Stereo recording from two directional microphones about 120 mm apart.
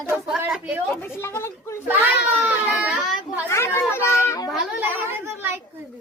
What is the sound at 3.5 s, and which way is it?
Speech, 20° left (ahead or behind).